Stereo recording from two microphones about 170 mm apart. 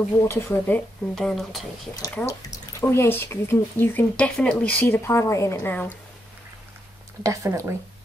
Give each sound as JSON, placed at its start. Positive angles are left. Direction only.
{"t": 0.3, "sound": "speech", "side_deg": 10}
{"t": 2.1, "sound": "speech", "side_deg": 20}
{"t": 7.2, "sound": "speech", "side_deg": -20}